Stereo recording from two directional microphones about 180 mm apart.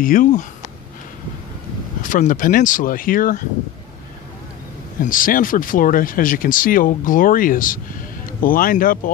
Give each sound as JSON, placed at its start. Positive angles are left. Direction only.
{"t": 0.0, "sound": "speech", "side_deg": 50}
{"t": 2.0, "sound": "speech", "side_deg": 45}
{"t": 5.0, "sound": "speech", "side_deg": 50}